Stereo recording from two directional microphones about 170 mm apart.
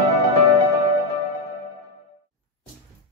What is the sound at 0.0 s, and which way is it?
Music, 35° right (ahead or behind).